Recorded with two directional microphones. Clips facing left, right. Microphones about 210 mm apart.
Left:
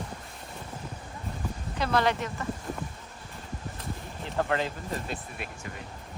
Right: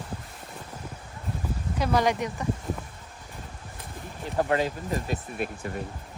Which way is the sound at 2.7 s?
Centre (ahead or behind).